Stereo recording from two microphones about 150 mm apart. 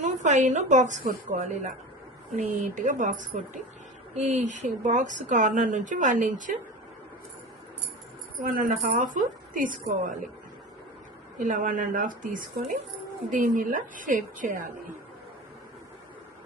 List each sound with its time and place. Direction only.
0.0 s a woman's voice: 55° right (ahead or behind)
8.4 s a woman's voice: 70° right (ahead or behind)
11.3 s a woman's voice: 60° right (ahead or behind)